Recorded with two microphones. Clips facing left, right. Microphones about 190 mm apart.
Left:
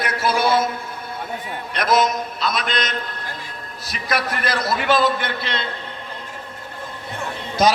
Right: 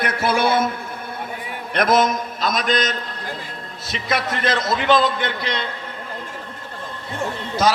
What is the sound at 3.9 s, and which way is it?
A man's voice, 25° right (ahead or behind).